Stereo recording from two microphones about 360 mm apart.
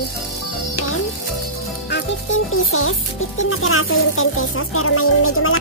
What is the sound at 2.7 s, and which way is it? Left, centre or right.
Speech, left.